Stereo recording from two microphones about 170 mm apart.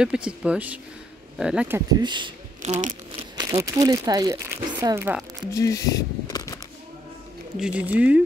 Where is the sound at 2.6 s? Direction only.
45° right (ahead or behind).